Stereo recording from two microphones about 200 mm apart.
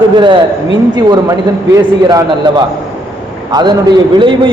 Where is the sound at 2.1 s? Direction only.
20° right (ahead or behind).